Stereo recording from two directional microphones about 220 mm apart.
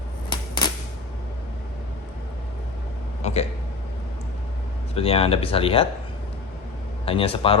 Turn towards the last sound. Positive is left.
turn(degrees=25)  # may be behind; listen again after turning